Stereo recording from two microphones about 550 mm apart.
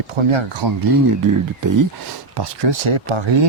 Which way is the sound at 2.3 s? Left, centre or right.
Right.